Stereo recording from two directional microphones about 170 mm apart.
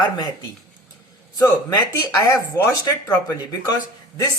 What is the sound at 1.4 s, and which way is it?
Speech, 20° left (ahead or behind).